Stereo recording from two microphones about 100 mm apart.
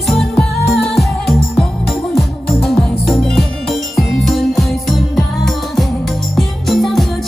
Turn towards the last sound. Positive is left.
turn(degrees=0)  # may be behind; listen again after turning